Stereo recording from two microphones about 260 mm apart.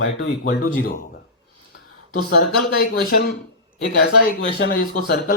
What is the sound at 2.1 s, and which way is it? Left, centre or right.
Speech, left.